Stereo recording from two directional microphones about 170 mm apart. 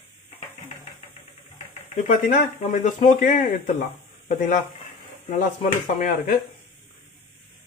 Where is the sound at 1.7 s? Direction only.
45° left (ahead or behind).